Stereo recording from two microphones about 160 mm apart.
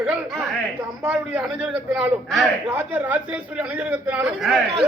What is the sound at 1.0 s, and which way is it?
A man's voice, 5° right (ahead or behind).